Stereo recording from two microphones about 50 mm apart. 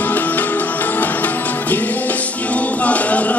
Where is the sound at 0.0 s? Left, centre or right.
Left.